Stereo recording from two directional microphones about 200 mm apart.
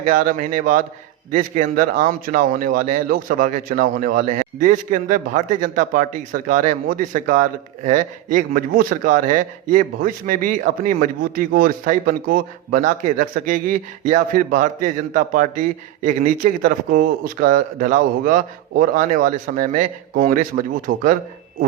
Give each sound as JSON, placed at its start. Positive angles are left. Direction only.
{"t": 0.0, "sound": "speech", "side_deg": -40}